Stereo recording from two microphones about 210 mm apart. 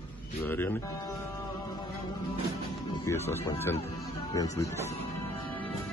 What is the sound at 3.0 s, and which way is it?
Speech, 15° left (ahead or behind).